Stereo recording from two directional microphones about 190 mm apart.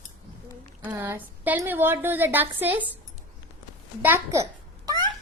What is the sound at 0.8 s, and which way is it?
A woman's voice, 15° right (ahead or behind).